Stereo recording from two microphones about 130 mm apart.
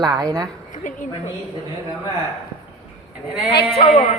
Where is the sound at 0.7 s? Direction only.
80° left.